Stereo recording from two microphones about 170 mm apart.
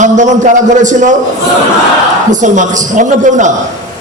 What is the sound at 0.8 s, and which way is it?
Speech, 45° right (ahead or behind).